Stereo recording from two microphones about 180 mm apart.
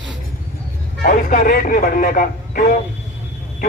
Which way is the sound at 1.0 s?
50° left (ahead or behind).